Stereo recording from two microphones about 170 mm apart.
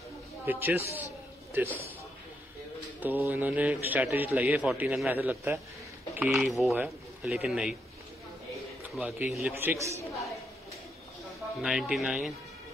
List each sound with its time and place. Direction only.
0.5 s a man's voice: 10° right (ahead or behind)
3.0 s a man's voice: 10° right (ahead or behind)
8.9 s a man's voice: 5° right (ahead or behind)
11.6 s speech: 5° right (ahead or behind)